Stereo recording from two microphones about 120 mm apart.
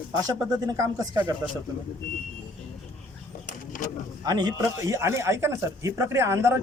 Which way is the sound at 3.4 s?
90° left.